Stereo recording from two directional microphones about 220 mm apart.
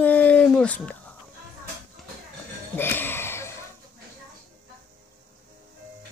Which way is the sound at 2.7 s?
10° left (ahead or behind).